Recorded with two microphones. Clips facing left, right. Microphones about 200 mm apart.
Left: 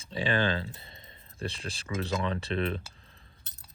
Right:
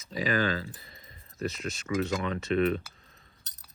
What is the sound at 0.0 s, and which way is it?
Speech, 30° left (ahead or behind).